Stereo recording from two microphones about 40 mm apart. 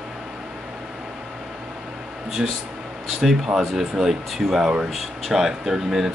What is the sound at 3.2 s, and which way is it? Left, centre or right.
Speech, centre.